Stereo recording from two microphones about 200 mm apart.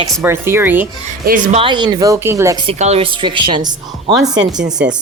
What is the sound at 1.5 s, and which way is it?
Speech, 25° right (ahead or behind).